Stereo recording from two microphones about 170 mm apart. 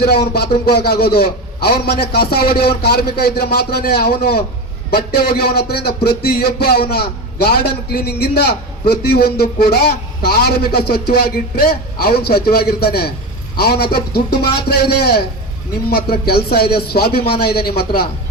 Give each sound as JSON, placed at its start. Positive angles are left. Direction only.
{"t": 0.0, "sound": "a man's voice", "side_deg": 65}